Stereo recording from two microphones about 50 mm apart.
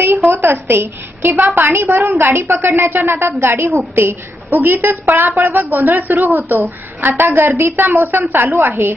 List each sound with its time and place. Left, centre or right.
0.0 s a woman's voice: right
1.4 s a woman's voice: right